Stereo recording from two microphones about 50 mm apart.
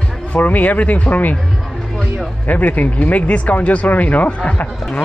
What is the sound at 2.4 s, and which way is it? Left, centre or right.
Speech, left.